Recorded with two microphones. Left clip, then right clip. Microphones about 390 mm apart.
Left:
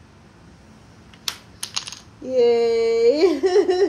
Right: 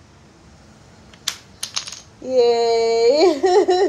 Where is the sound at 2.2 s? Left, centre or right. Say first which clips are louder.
Right 1 dB; centre.